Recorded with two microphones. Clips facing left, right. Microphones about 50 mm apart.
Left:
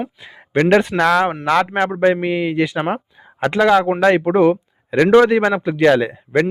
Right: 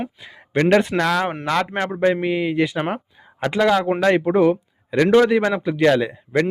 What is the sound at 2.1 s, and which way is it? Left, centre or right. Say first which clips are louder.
Speech: left 2 dB; centre.